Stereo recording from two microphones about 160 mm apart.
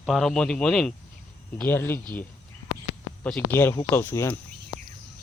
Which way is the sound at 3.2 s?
10° left (ahead or behind).